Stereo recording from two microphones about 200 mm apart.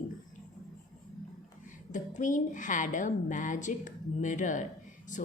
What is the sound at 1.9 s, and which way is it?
A woman's voice, 40° left (ahead or behind).